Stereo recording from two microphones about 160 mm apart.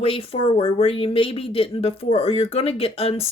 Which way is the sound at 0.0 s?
35° left (ahead or behind).